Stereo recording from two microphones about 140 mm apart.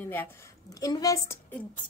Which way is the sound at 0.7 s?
25° left (ahead or behind).